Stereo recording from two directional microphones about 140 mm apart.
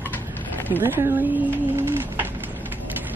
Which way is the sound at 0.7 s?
15° right (ahead or behind).